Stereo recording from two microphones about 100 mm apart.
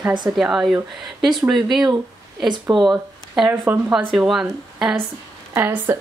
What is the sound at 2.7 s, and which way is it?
Speech, centre (ahead or behind).